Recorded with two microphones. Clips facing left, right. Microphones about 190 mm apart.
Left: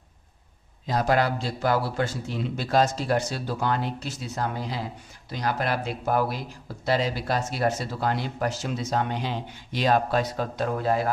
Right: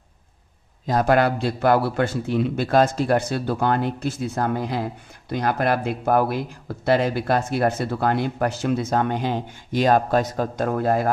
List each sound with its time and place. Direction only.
0.9 s speech: 55° right (ahead or behind)